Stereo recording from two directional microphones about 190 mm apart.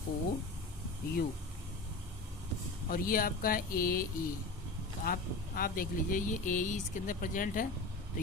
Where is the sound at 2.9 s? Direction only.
50° left (ahead or behind).